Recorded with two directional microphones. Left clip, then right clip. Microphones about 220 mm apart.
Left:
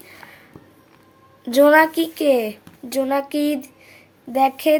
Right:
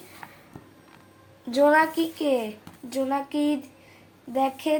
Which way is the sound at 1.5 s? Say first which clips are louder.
Left 6 dB; 55° left (ahead or behind).